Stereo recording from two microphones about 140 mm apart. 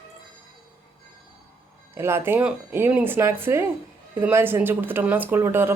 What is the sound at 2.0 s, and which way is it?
A woman's voice, 15° right (ahead or behind).